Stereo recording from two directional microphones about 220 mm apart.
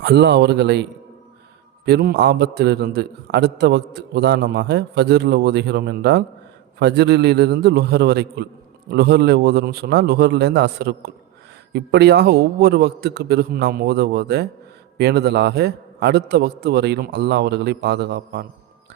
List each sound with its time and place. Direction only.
0.0 s a man's voice: 50° right (ahead or behind)